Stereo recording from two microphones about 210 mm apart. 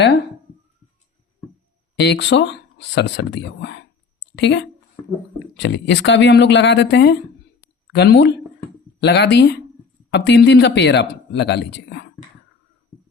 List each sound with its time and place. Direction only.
2.0 s a woman's voice: 55° left (ahead or behind)